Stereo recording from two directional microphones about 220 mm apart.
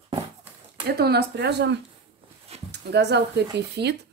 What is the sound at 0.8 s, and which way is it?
Speech, 45° right (ahead or behind).